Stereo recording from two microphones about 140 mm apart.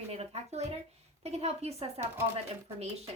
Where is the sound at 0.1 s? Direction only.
50° right (ahead or behind).